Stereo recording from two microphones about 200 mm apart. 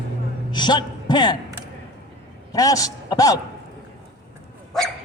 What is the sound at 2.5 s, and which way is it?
Speech, 15° left (ahead or behind).